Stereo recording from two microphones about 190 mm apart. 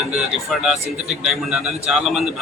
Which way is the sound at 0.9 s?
35° right (ahead or behind).